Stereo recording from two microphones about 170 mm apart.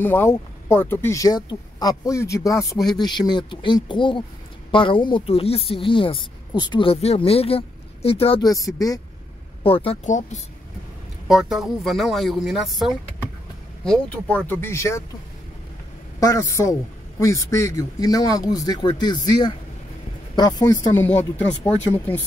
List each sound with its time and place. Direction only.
0.0 s a man's voice: 15° left (ahead or behind); by 8.5 s 35° left (ahead or behind)
8.5 s a man's voice: 20° left (ahead or behind)
9.6 s speech: 35° left (ahead or behind)
10.0 s speech: 45° left (ahead or behind)
11.2 s speech: centre (ahead or behind); by 15.0 s 15° left (ahead or behind)
16.2 s a man's voice: 15° left (ahead or behind)